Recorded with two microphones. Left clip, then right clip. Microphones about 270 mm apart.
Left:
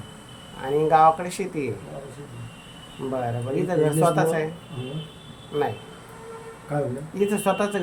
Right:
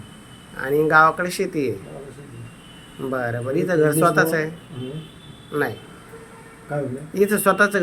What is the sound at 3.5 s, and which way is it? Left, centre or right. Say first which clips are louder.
Speech: right 4 dB; centre.